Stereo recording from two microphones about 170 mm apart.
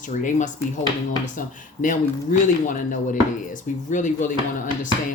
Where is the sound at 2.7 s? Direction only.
50° left (ahead or behind).